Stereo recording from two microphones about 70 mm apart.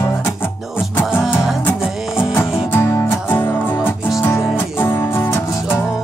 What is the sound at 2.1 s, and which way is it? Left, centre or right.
Music, left.